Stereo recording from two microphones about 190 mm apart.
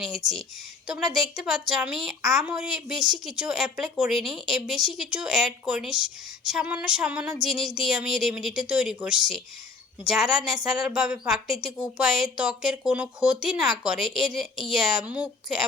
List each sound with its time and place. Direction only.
0.2 s a woman's voice: 20° right (ahead or behind)
0.9 s a woman's voice: 5° right (ahead or behind)